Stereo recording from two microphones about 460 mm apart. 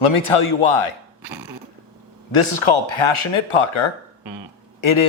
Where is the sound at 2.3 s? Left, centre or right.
Left.